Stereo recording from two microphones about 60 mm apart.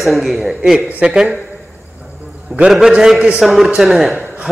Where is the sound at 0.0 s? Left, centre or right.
Centre.